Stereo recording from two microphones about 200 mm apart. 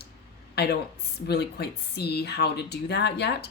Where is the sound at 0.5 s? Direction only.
55° left (ahead or behind).